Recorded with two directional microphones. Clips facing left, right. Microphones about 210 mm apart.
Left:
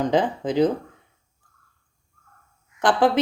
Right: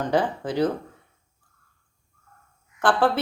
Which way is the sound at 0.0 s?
20° left (ahead or behind).